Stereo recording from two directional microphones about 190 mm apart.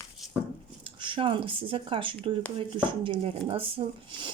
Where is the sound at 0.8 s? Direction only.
25° right (ahead or behind).